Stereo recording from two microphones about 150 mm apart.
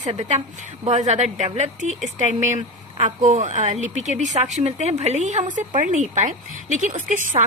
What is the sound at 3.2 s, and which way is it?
A woman's voice, 50° right (ahead or behind).